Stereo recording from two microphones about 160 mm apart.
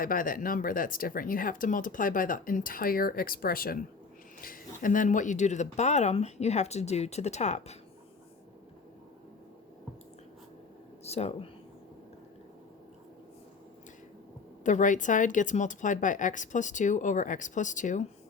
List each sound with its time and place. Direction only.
0.0 s speech: 60° left (ahead or behind)
11.0 s speech: 40° left (ahead or behind)
14.6 s speech: 50° left (ahead or behind)